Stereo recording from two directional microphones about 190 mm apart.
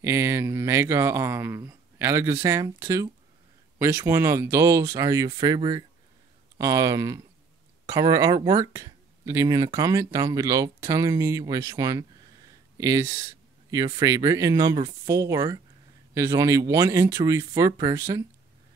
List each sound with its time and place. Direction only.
0.0 s speech: 15° right (ahead or behind)